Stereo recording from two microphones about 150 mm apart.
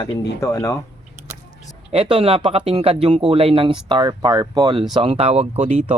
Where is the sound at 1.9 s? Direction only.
40° right (ahead or behind).